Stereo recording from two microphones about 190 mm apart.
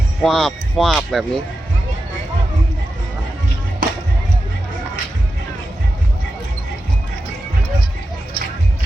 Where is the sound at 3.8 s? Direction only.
50° right (ahead or behind).